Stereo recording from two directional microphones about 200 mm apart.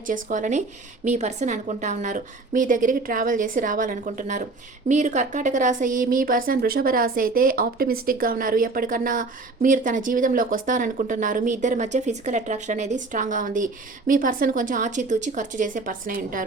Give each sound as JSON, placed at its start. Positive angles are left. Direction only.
{"t": 0.1, "sound": "a woman's voice", "side_deg": -40}